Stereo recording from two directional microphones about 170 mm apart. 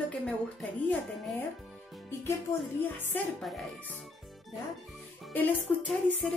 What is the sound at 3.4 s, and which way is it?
Speech, centre (ahead or behind).